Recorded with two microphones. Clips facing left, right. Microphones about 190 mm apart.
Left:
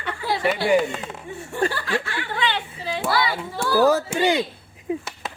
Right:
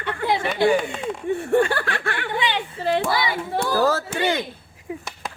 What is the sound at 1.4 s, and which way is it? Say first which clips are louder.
Speech: right 4 dB; 60° right (ahead or behind).